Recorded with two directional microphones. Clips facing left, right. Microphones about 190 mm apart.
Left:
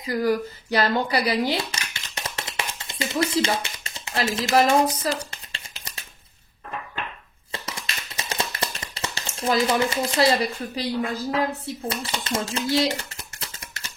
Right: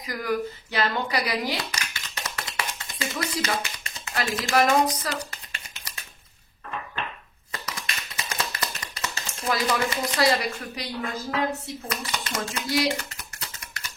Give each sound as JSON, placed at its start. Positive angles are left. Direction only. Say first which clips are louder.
{"t": 0.0, "sound": "a sound", "louder": "left 5 dB", "side_deg": 30}
{"t": 8.2, "sound": "typewriter", "louder": "left 3 dB", "side_deg": 30}
{"t": 9.7, "sound": "speech", "louder": "left 3 dB", "side_deg": 25}